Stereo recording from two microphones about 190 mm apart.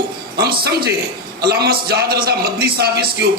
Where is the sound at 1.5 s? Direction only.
55° right (ahead or behind).